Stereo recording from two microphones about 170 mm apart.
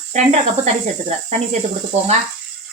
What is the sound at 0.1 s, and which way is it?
A woman's voice, 45° right (ahead or behind).